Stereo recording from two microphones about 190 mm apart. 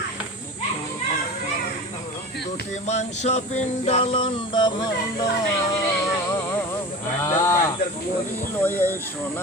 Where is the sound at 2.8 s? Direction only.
35° left (ahead or behind).